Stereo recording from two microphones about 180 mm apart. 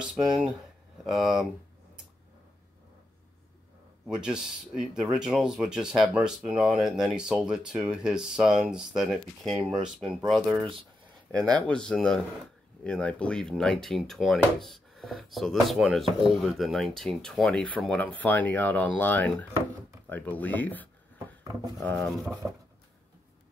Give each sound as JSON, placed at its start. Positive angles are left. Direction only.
{"t": 0.0, "sound": "speech", "side_deg": -5}
{"t": 4.1, "sound": "speech", "side_deg": -5}
{"t": 11.4, "sound": "speech", "side_deg": -25}
{"t": 11.7, "sound": "speech", "side_deg": 5}